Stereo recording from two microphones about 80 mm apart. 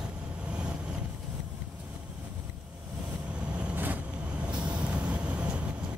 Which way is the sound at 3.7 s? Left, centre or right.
Right.